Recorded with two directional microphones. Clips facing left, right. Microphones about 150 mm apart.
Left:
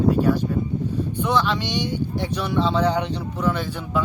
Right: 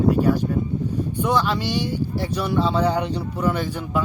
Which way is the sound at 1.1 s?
10° right (ahead or behind).